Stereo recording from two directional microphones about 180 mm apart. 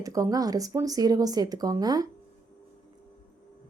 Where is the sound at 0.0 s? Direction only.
20° right (ahead or behind).